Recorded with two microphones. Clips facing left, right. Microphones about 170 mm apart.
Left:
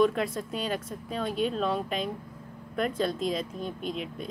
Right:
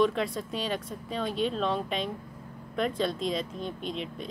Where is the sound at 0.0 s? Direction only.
Centre (ahead or behind).